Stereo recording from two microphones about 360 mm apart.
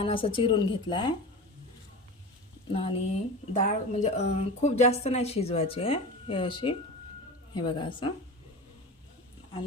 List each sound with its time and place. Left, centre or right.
0.0 s a woman's voice: centre
2.7 s a woman's voice: centre